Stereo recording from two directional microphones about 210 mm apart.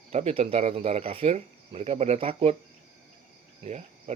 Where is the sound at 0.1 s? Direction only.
30° right (ahead or behind).